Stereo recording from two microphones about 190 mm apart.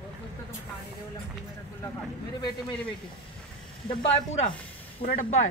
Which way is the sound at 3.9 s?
25° left (ahead or behind).